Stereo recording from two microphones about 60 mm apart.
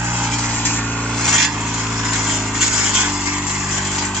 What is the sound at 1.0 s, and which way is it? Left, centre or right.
Vehicle, centre.